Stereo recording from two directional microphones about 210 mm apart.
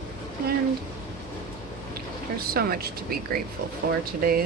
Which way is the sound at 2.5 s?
45° right (ahead or behind).